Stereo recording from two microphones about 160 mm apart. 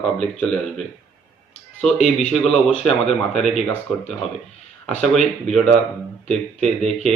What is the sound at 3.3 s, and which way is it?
A man's voice, centre (ahead or behind).